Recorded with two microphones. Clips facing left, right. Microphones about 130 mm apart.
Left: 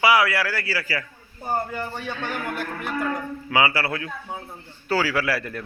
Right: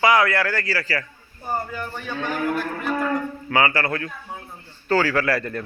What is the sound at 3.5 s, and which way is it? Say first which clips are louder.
A man's voice: right 1 dB; 10° left (ahead or behind).